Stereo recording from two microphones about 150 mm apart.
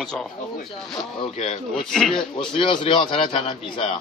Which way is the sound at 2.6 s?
35° left (ahead or behind).